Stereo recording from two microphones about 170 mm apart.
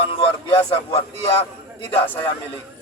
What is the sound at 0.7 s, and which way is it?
Speech, 35° left (ahead or behind).